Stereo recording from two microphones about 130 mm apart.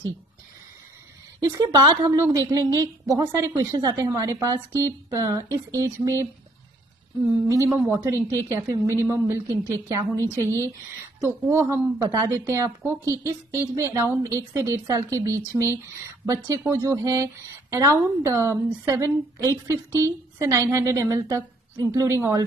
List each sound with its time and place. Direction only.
1.4 s speech: 30° right (ahead or behind)
7.2 s speech: 25° right (ahead or behind)